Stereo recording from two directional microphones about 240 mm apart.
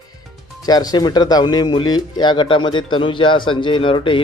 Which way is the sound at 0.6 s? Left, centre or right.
Centre.